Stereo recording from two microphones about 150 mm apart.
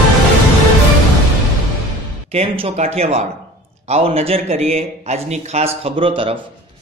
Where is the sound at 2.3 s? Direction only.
40° right (ahead or behind).